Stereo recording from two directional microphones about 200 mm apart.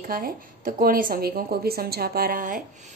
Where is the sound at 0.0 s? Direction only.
45° right (ahead or behind).